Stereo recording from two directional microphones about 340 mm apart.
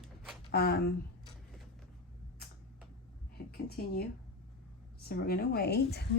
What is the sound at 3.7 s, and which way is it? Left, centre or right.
Speech, left.